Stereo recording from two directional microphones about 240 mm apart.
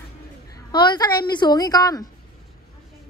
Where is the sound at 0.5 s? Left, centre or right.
Centre.